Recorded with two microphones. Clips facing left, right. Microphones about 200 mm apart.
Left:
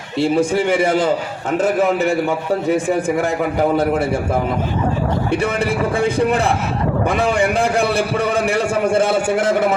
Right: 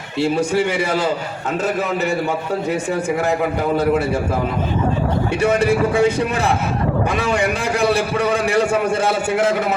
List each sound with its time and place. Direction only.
5.3 s a man's voice: 60° left (ahead or behind)
7.1 s a man's voice: 60° left (ahead or behind)
8.4 s a man's voice: 60° right (ahead or behind)
8.8 s a man's voice: 55° left (ahead or behind)